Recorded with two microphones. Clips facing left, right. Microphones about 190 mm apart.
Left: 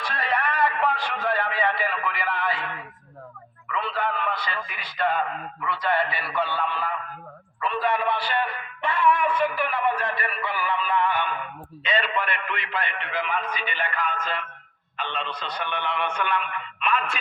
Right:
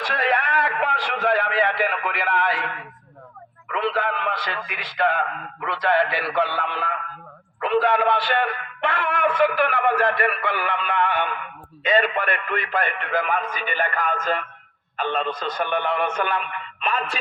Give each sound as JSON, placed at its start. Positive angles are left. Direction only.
{"t": 0.0, "sound": "a man's voice", "side_deg": -90}
{"t": 3.7, "sound": "a man's voice", "side_deg": -75}
{"t": 11.8, "sound": "a man's voice", "side_deg": -50}